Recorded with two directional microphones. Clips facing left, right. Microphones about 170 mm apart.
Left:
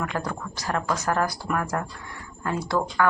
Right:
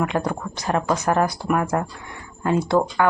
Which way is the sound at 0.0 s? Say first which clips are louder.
Right 6 dB; 20° right (ahead or behind).